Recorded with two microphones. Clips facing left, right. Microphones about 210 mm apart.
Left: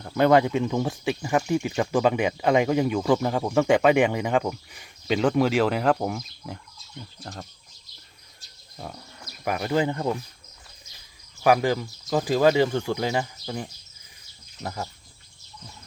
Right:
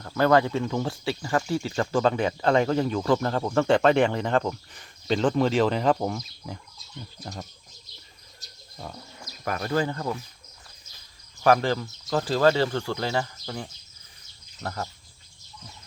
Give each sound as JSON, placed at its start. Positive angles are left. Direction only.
{"t": 0.0, "sound": "speech", "side_deg": 20}
{"t": 9.4, "sound": "speech", "side_deg": 10}
{"t": 11.4, "sound": "speech", "side_deg": 10}